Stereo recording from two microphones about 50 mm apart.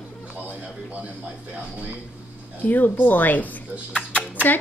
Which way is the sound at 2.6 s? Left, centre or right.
Left.